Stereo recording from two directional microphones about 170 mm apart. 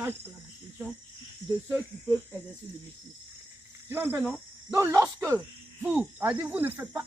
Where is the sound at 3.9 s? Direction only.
10° right (ahead or behind).